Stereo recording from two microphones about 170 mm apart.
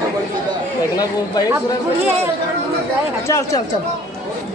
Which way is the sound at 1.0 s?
20° left (ahead or behind).